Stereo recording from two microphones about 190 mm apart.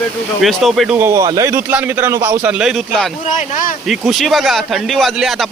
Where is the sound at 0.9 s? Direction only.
15° right (ahead or behind).